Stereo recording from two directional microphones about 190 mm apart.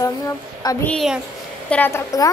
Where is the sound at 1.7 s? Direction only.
10° left (ahead or behind).